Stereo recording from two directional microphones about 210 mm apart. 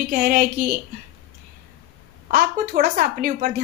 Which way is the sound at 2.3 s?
45° right (ahead or behind).